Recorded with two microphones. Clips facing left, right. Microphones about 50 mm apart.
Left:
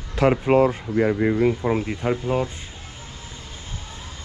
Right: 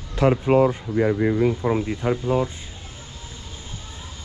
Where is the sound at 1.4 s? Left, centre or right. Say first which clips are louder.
Even; left.